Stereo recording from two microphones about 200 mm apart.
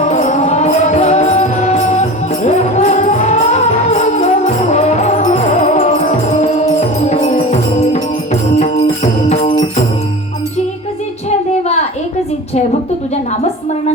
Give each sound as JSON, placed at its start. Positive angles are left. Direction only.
{"t": 0.0, "sound": "music", "side_deg": 35}